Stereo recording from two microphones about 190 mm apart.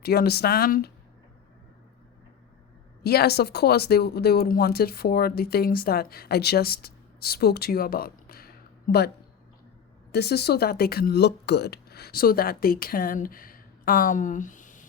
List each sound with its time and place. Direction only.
0.0 s speech: 55° left (ahead or behind)
3.0 s speech: 55° left (ahead or behind)
10.1 s speech: 60° left (ahead or behind); by 14.8 s 40° left (ahead or behind)